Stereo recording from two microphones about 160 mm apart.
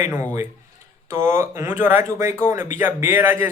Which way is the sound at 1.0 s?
15° right (ahead or behind).